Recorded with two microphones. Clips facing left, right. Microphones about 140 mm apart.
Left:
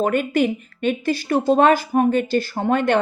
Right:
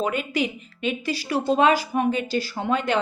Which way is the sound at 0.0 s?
50° left (ahead or behind).